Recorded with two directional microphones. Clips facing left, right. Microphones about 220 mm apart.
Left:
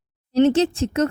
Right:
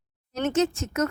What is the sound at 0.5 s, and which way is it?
Speech, 30° left (ahead or behind).